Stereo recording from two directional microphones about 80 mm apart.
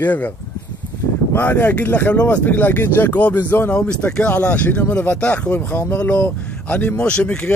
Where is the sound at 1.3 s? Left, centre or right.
Left.